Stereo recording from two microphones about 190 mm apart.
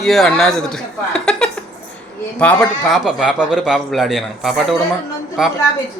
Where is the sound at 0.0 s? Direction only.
Centre (ahead or behind).